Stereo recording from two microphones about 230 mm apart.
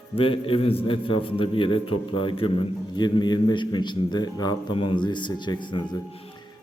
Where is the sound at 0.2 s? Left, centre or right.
Left.